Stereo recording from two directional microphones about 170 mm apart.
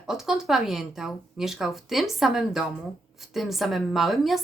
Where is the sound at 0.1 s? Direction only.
Centre (ahead or behind).